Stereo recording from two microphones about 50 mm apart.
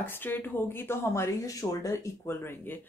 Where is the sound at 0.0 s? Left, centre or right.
Left.